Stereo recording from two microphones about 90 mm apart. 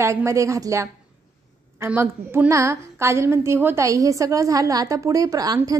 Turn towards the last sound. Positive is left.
turn(degrees=-45)  # may be behind; listen again after turning